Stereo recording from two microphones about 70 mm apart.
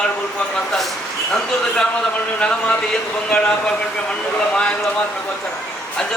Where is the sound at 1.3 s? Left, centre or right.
Centre.